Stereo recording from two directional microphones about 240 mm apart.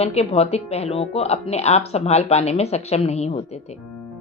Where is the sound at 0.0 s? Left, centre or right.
Left.